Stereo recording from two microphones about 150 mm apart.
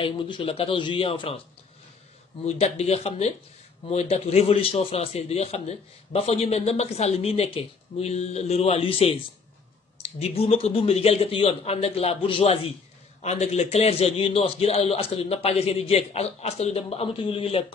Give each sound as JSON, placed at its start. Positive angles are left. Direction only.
{"t": 0.0, "sound": "speech", "side_deg": 35}
{"t": 2.4, "sound": "a man's voice", "side_deg": 45}